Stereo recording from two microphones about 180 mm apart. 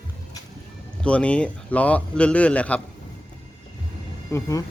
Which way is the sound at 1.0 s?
5° left (ahead or behind).